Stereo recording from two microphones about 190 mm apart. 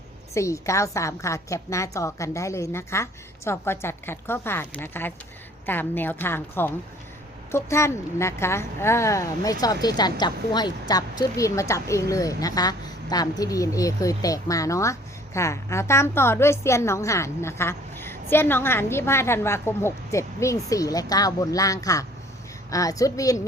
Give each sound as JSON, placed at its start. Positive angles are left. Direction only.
{"t": 0.3, "sound": "a woman's voice", "side_deg": 15}